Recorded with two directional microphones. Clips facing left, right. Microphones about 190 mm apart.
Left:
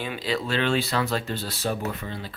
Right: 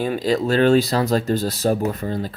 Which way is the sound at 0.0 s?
45° right (ahead or behind).